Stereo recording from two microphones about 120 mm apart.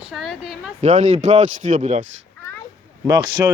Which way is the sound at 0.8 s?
75° right (ahead or behind).